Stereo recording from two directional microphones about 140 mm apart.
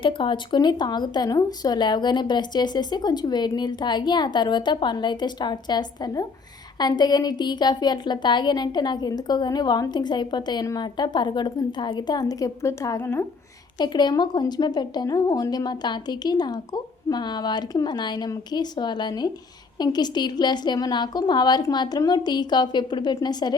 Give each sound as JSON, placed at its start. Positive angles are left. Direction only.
{"t": 0.0, "sound": "a woman's voice", "side_deg": 35}
{"t": 13.7, "sound": "a woman's voice", "side_deg": 30}